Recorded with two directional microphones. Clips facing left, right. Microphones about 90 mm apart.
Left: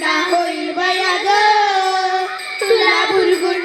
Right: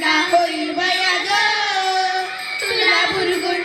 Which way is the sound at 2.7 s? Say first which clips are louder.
Left 6 dB; 30° left (ahead or behind).